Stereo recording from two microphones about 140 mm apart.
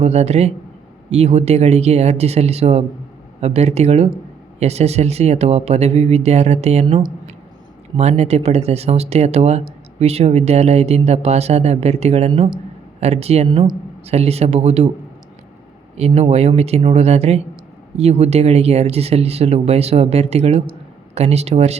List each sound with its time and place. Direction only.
0.0 s speech: 50° right (ahead or behind)
7.9 s speech: 50° right (ahead or behind)
16.0 s speech: 50° right (ahead or behind)